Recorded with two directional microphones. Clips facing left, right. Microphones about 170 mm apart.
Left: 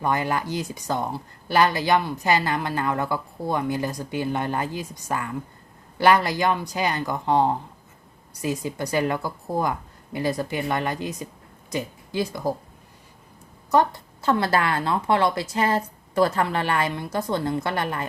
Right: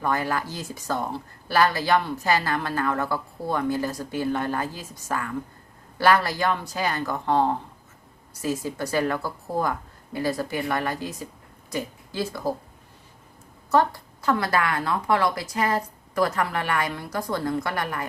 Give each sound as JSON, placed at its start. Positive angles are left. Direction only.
{"t": 0.0, "sound": "a woman's voice", "side_deg": 20}
{"t": 13.7, "sound": "a woman's voice", "side_deg": 20}